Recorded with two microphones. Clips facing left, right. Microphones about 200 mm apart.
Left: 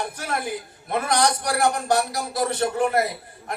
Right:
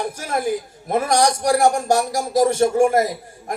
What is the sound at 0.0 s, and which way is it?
Speech, 45° right (ahead or behind).